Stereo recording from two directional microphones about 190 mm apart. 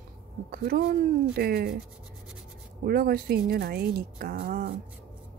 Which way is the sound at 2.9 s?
50° right (ahead or behind).